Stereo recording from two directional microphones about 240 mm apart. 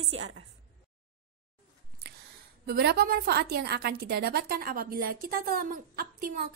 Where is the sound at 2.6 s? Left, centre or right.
Right.